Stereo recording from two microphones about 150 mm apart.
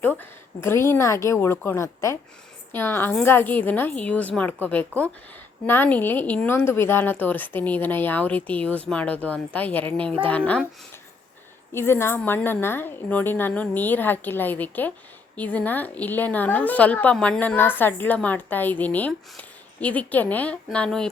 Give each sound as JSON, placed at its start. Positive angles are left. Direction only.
{"t": 0.2, "sound": "a woman's voice", "side_deg": 15}
{"t": 11.7, "sound": "a woman's voice", "side_deg": 15}